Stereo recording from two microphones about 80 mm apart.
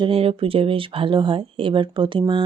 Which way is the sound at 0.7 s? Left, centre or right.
Right.